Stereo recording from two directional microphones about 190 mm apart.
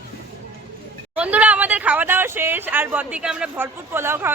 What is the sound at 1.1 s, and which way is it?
A man's voice, 5° right (ahead or behind).